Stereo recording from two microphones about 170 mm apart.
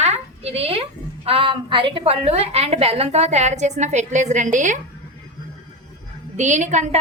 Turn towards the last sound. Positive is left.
turn(degrees=-45)  # may be behind; listen again after turning